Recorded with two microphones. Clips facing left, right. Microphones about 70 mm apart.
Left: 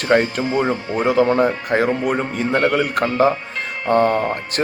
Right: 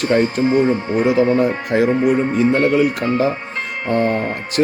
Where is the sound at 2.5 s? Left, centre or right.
Left.